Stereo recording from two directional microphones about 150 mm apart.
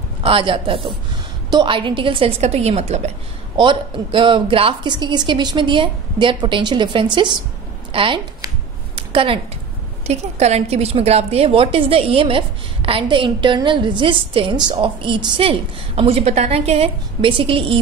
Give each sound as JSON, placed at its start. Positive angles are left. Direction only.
{"t": 0.2, "sound": "a woman's voice", "side_deg": -35}
{"t": 3.5, "sound": "a woman's voice", "side_deg": -35}
{"t": 8.9, "sound": "a sound", "side_deg": -35}
{"t": 10.0, "sound": "a woman's voice", "side_deg": -45}